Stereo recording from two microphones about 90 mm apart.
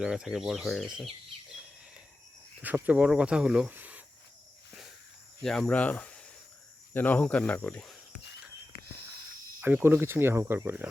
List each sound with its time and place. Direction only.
0.0 s speech: 5° right (ahead or behind)
2.6 s speech: 20° right (ahead or behind)
3.7 s cricket: 20° right (ahead or behind)
5.4 s cricket: 5° left (ahead or behind)
5.6 s speech: 15° left (ahead or behind)
9.6 s speech: 20° right (ahead or behind)